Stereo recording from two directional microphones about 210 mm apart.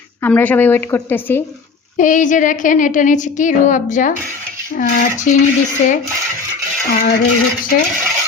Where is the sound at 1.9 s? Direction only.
35° left (ahead or behind).